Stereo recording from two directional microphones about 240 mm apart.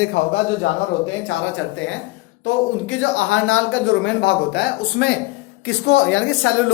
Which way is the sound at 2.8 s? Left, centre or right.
Left.